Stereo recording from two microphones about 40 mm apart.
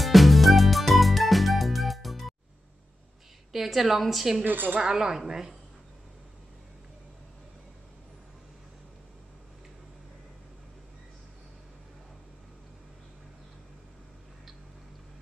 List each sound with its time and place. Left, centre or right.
0.0 s music: centre
3.5 s a woman's voice: centre
4.5 s speech: right
4.7 s speech: centre